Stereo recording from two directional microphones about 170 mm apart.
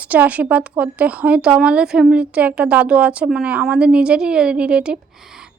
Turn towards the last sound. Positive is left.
turn(degrees=-5)  # may be behind; listen again after turning